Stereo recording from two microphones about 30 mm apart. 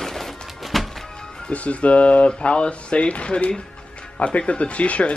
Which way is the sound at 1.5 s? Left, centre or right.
Left.